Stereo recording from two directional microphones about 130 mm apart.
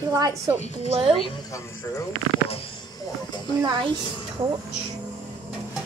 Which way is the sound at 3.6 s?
35° right (ahead or behind).